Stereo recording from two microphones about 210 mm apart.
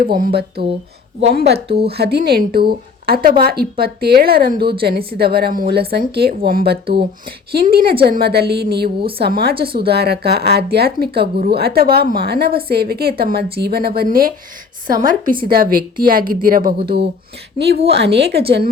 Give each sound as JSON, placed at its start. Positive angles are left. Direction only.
{"t": 0.0, "sound": "a woman's voice", "side_deg": -45}